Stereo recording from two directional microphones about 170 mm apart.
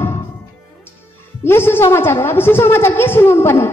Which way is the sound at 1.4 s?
15° left (ahead or behind).